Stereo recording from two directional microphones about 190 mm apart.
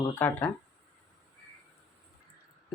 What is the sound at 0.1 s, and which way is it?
Speech, 10° left (ahead or behind).